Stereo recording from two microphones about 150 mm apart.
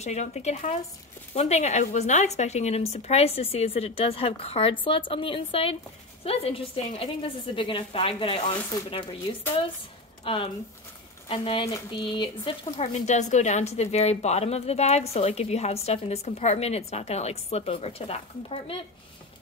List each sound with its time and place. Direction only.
0.0 s a woman's voice: 50° left (ahead or behind)
10.2 s a woman's voice: 35° left (ahead or behind)
12.7 s speech: 50° left (ahead or behind)